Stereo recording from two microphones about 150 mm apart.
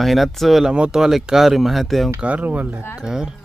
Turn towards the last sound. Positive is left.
turn(degrees=-5)  # may be behind; listen again after turning